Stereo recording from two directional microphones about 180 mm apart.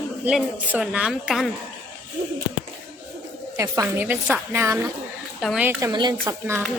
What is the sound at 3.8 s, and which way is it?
A woman's voice, 10° right (ahead or behind).